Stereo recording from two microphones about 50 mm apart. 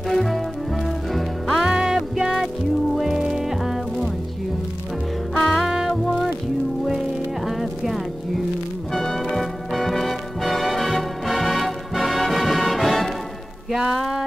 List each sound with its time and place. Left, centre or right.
0.1 s music: centre
1.6 s music: centre
5.4 s music: centre
5.7 s music: centre
7.4 s music: centre
8.9 s music: centre